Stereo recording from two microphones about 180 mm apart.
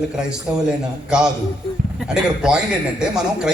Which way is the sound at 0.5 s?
10° right (ahead or behind).